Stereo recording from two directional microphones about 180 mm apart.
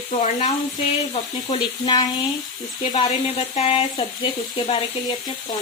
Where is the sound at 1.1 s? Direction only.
30° left (ahead or behind).